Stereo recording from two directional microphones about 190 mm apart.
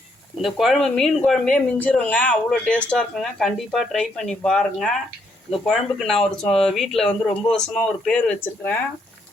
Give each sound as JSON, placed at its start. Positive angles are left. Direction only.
{"t": 0.4, "sound": "speech", "side_deg": 0}